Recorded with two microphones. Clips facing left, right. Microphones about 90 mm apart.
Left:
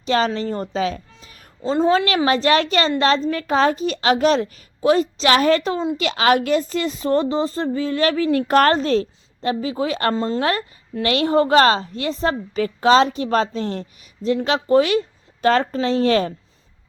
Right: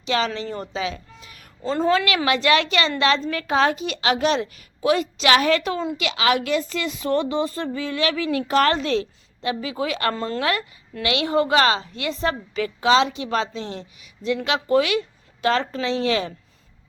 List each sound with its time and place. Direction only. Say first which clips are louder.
0.0 s a woman's voice: left 4 dB; 40° left (ahead or behind)
6.0 s a woman's voice: left 5 dB; 40° left (ahead or behind); by 10.4 s 25° left (ahead or behind)
10.4 s a woman's voice: left 2 dB; 35° left (ahead or behind)